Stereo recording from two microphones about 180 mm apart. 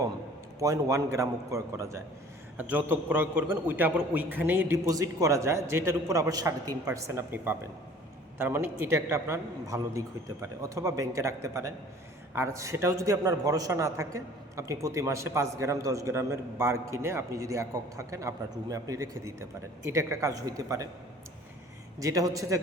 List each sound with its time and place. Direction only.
0.6 s a man's voice: 20° right (ahead or behind)
21.9 s a man's voice: 20° right (ahead or behind)